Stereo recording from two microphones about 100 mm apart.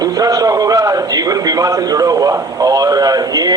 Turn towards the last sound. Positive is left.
turn(degrees=-40)  # may be behind; listen again after turning